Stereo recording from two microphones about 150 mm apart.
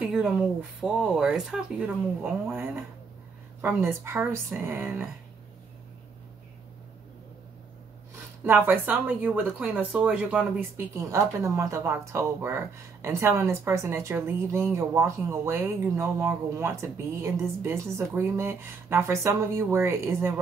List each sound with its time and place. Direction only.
0.0 s speech: 5° right (ahead or behind)
8.5 s speech: 15° right (ahead or behind)